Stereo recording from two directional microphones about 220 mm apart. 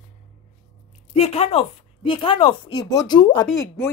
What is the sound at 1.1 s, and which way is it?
A woman's voice, 30° left (ahead or behind).